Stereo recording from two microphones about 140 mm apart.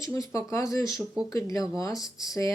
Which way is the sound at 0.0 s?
25° left (ahead or behind).